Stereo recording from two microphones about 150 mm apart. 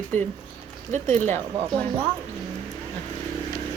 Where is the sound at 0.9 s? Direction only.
50° right (ahead or behind).